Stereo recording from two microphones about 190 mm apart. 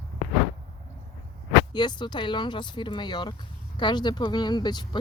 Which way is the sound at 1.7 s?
25° left (ahead or behind).